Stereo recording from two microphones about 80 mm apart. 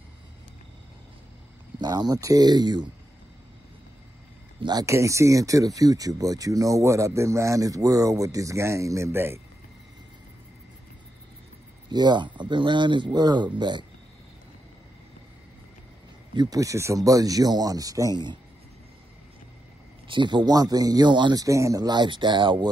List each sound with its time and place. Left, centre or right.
1.8 s speech: right
4.6 s speech: right
4.8 s speech: right
11.9 s speech: right
16.3 s speech: right
18.1 s speech: right
20.1 s speech: right
21.4 s speech: right
21.8 s speech: right